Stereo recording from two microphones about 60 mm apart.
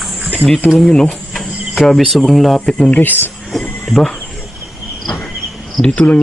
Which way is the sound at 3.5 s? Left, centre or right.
Centre.